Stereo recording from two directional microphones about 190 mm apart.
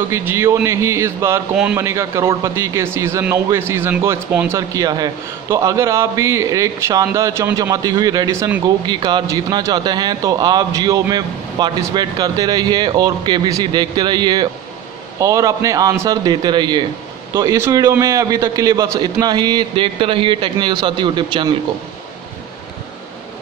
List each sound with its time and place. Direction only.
0.1 s a man's voice: 10° right (ahead or behind)
8.6 s a man's voice: 25° right (ahead or behind)